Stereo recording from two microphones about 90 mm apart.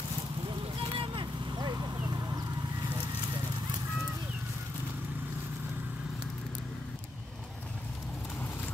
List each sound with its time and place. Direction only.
0.5 s vehicle: 70° right (ahead or behind); by 2.4 s 45° right (ahead or behind)